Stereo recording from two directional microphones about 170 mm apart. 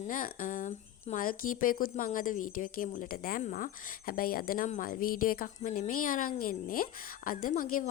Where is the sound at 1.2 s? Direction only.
55° left (ahead or behind).